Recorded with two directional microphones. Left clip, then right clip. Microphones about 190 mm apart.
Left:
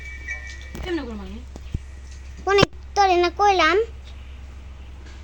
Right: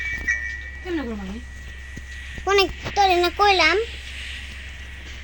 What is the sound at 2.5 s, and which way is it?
Speech, centre (ahead or behind).